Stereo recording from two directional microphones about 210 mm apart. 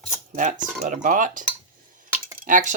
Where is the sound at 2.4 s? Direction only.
35° right (ahead or behind).